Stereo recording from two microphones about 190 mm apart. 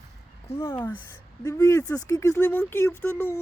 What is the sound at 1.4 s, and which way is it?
Speech, 15° left (ahead or behind).